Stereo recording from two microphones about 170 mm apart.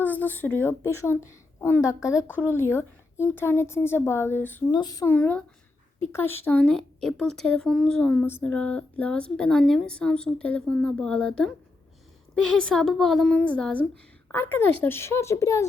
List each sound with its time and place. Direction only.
0.0 s a woman's voice: 10° left (ahead or behind)
4.7 s speech: 25° left (ahead or behind)
5.1 s a woman's voice: 10° left (ahead or behind)